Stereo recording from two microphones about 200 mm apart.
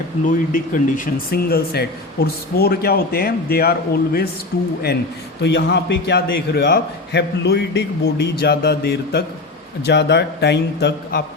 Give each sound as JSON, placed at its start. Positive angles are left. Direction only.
{"t": 0.5, "sound": "a man's voice", "side_deg": 40}